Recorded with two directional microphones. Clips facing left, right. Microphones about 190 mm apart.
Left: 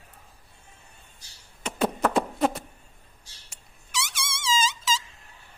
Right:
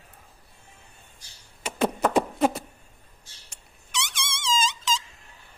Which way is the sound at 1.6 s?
10° right (ahead or behind).